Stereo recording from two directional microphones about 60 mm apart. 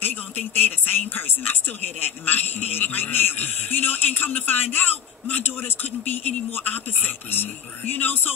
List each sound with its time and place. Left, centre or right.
0.0 s a woman's voice: left